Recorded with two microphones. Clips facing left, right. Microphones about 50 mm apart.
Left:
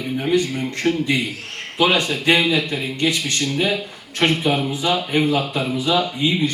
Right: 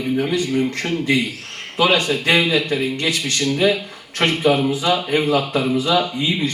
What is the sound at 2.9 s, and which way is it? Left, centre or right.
Speech, right.